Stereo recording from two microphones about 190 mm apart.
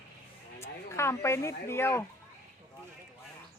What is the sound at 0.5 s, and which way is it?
Speech, 15° left (ahead or behind).